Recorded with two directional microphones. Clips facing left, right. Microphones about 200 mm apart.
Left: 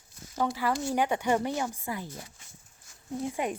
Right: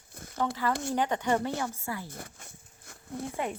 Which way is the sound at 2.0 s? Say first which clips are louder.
Even; 55° right (ahead or behind).